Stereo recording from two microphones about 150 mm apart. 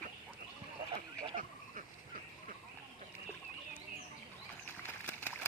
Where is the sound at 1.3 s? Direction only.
65° right (ahead or behind).